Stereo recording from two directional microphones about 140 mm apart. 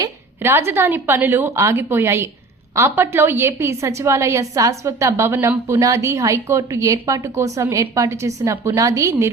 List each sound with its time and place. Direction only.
0.4 s a woman's voice: 15° right (ahead or behind)